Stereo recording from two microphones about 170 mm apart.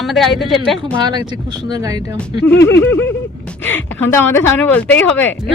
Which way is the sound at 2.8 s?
15° left (ahead or behind).